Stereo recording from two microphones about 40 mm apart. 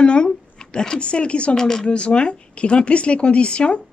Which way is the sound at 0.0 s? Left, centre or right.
Left.